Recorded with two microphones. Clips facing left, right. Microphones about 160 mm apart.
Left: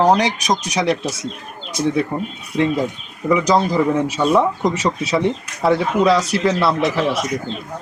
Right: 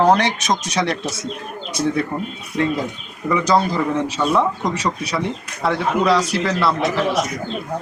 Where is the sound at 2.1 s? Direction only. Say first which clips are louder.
Left 2 dB; 15° left (ahead or behind).